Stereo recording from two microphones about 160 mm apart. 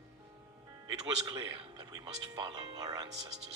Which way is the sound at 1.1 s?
25° right (ahead or behind).